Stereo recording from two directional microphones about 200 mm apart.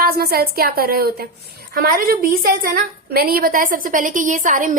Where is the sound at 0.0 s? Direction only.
50° right (ahead or behind).